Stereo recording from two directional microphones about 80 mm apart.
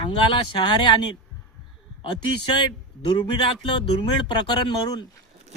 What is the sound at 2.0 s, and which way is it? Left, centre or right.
Speech, left.